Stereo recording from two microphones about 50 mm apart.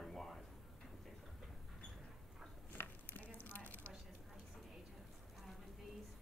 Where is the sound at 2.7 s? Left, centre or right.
Left.